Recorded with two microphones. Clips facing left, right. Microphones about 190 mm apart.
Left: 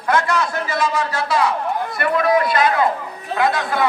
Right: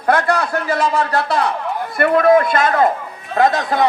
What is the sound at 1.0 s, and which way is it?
A man's voice, 55° right (ahead or behind).